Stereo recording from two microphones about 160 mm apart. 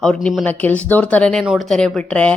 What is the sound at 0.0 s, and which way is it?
Speech, 5° left (ahead or behind).